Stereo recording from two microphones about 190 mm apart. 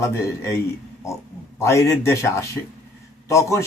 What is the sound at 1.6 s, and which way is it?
Speech, 15° left (ahead or behind).